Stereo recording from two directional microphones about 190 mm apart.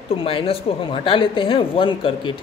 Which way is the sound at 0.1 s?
30° left (ahead or behind).